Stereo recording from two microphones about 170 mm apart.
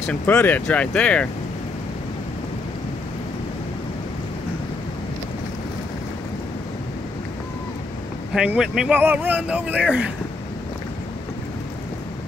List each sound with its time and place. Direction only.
0.1 s speech: 10° left (ahead or behind)
8.4 s speech: 5° right (ahead or behind)